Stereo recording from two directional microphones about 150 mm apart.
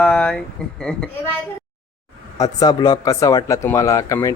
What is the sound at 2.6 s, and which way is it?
Speech, 25° left (ahead or behind).